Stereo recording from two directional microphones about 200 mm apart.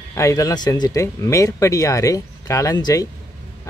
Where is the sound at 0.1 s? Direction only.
15° left (ahead or behind).